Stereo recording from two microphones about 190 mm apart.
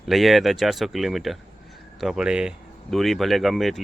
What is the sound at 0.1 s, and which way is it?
Speech, centre (ahead or behind).